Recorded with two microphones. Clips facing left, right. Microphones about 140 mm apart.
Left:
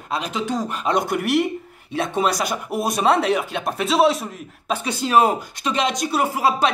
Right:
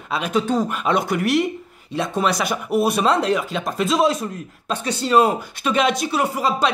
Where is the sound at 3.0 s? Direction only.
65° left (ahead or behind).